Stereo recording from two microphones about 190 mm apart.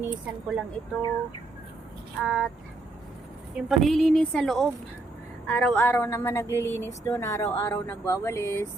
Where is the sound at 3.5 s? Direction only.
Centre (ahead or behind).